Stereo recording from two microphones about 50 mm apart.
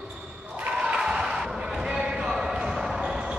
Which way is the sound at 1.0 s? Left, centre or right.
Centre.